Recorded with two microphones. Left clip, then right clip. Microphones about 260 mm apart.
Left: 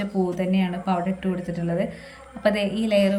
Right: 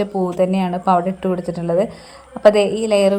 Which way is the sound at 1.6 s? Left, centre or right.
Right.